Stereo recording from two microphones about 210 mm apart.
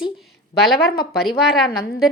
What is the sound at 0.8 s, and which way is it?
Speech, 50° left (ahead or behind).